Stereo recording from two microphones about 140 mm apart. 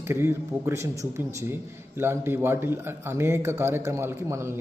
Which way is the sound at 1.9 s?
15° right (ahead or behind).